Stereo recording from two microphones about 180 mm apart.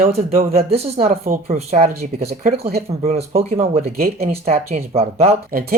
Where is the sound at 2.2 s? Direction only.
55° right (ahead or behind).